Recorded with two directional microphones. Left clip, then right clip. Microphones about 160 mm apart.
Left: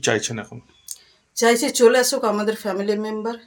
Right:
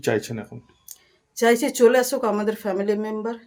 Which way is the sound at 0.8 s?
35° right (ahead or behind).